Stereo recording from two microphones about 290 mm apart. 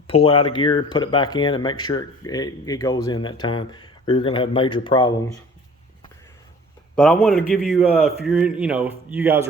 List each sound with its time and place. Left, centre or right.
0.1 s speech: centre
6.9 s a man's voice: centre